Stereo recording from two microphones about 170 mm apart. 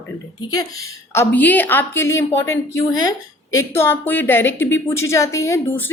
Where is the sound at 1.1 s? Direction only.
10° left (ahead or behind).